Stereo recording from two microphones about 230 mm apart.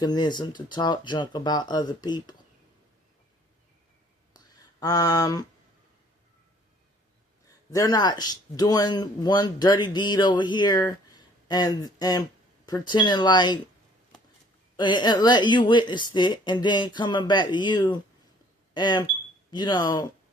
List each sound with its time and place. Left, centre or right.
0.0 s a woman's voice: centre
4.4 s a sound: centre
7.7 s a woman's voice: centre
14.8 s a woman's voice: centre